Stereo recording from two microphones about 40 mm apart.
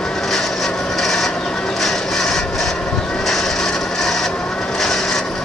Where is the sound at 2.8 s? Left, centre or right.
Left.